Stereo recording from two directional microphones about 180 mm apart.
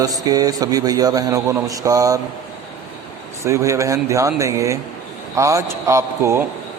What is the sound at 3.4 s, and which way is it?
Speech, 15° right (ahead or behind).